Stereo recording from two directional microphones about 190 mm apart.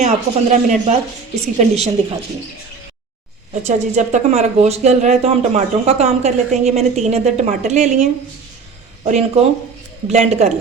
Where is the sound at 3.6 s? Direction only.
35° right (ahead or behind).